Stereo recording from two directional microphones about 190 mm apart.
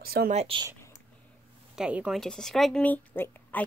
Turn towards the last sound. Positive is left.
turn(degrees=10)  # may be behind; listen again after turning